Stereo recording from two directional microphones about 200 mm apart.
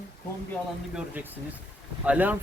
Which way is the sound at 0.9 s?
10° right (ahead or behind).